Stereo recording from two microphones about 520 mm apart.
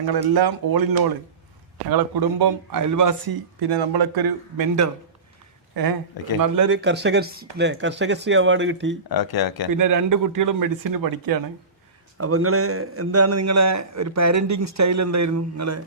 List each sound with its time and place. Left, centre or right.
0.0 s speech: right
6.7 s a man's voice: centre
9.0 s speech: left
9.7 s speech: right
12.1 s a man's voice: right